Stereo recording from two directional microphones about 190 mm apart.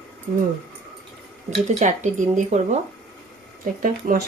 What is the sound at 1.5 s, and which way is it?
Speech, 40° right (ahead or behind).